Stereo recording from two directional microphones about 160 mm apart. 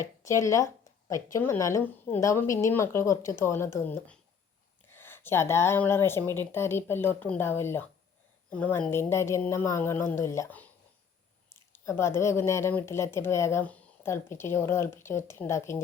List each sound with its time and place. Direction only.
0.0 s speech: 20° left (ahead or behind)
11.7 s speech: 15° left (ahead or behind)